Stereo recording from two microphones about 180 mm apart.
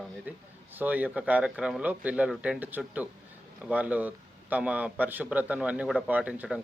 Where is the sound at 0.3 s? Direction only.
10° right (ahead or behind).